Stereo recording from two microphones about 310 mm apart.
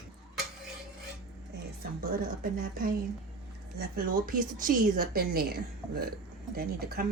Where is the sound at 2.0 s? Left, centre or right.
Right.